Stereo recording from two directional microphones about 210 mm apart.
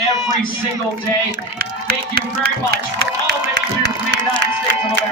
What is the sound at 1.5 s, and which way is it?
Speech, 45° right (ahead or behind).